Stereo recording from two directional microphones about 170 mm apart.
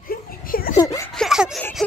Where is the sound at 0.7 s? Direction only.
20° left (ahead or behind).